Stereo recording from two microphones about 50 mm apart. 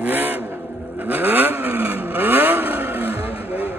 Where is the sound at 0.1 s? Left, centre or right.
Right.